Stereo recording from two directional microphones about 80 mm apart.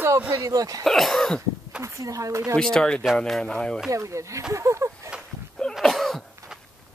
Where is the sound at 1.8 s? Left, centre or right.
Right.